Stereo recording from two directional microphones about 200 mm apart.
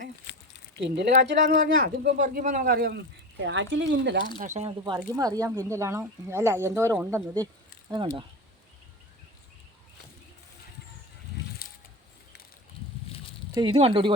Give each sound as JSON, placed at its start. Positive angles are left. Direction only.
{"t": 0.8, "sound": "speech", "side_deg": -60}
{"t": 1.8, "sound": "speech", "side_deg": -45}
{"t": 3.4, "sound": "speech", "side_deg": -65}
{"t": 4.4, "sound": "speech", "side_deg": -35}
{"t": 5.1, "sound": "speech", "side_deg": -20}
{"t": 11.6, "sound": "a sound", "side_deg": 50}
{"t": 13.5, "sound": "speech", "side_deg": -25}